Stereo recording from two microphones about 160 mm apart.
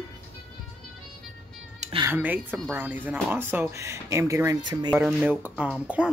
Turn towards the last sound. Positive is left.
turn(degrees=-5)  # may be behind; listen again after turning